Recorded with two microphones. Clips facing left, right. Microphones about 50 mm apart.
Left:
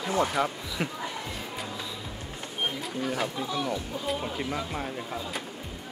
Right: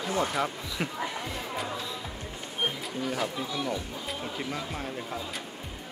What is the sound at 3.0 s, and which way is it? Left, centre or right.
Speech, centre.